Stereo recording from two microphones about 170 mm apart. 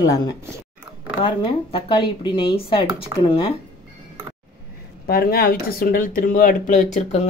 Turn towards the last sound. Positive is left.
turn(degrees=40)  # may be behind; listen again after turning